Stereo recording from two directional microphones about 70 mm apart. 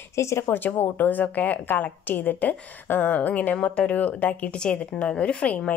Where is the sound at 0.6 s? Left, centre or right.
Left.